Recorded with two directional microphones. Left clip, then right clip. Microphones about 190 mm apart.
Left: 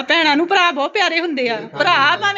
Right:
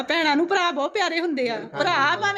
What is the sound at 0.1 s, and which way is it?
A woman's voice, 5° right (ahead or behind).